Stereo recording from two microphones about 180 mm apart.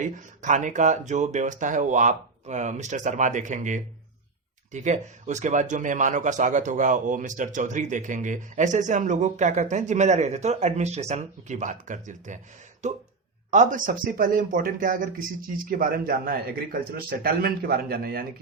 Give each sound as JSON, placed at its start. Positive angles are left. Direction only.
{"t": 0.0, "sound": "speech", "side_deg": -45}